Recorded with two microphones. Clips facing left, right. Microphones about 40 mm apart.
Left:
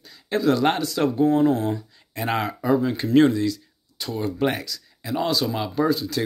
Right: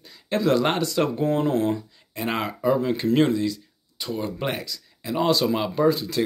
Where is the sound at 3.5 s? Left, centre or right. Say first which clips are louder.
Left 3 dB; right.